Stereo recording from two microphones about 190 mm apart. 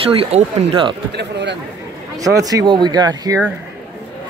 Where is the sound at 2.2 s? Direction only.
20° right (ahead or behind).